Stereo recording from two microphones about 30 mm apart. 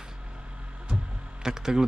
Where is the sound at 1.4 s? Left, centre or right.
Right.